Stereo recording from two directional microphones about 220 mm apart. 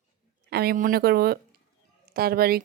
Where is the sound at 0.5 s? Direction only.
45° right (ahead or behind).